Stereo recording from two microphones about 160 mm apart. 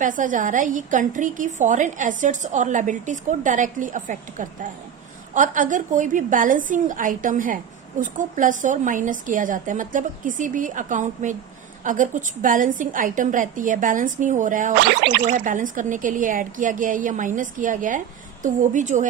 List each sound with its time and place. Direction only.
0.0 s a woman's voice: 55° right (ahead or behind)
14.8 s speech: 90° right
15.3 s a woman's voice: 55° right (ahead or behind)